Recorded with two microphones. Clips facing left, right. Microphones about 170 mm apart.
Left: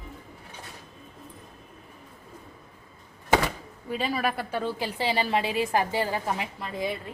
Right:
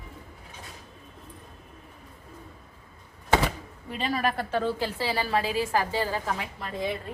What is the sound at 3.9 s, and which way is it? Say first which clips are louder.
A woman's voice: even; 5° left (ahead or behind).